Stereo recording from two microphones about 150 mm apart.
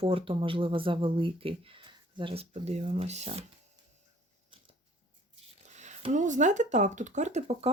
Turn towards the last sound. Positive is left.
turn(degrees=-50)  # may be behind; listen again after turning